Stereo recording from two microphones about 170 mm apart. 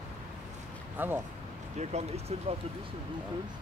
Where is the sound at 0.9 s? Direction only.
10° right (ahead or behind).